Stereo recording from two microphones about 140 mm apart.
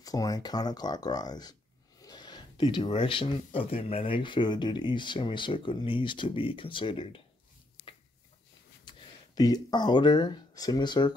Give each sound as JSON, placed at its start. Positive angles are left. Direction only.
{"t": 0.0, "sound": "speech", "side_deg": 25}
{"t": 8.8, "sound": "speech", "side_deg": 30}